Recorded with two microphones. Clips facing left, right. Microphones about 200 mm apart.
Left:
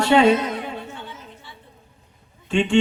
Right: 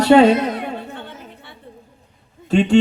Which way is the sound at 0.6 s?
60° right (ahead or behind).